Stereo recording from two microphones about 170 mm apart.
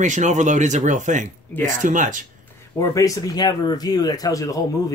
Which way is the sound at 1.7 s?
50° right (ahead or behind).